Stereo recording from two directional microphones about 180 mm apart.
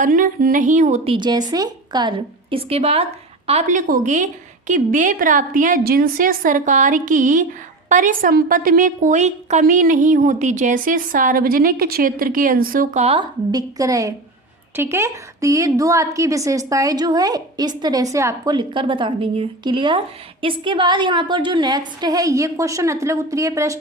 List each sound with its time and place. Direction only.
0.0 s a woman's voice: 50° right (ahead or behind)
1.1 s a woman's voice: 25° right (ahead or behind)
13.5 s a woman's voice: 20° right (ahead or behind)